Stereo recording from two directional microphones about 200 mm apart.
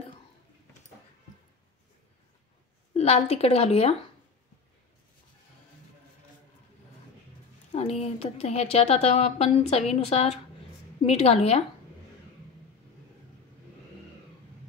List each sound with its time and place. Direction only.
2.9 s a woman's voice: 30° left (ahead or behind)
7.7 s a woman's voice: 30° left (ahead or behind)